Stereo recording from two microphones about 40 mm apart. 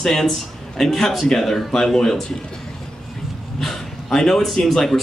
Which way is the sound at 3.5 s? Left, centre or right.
Centre.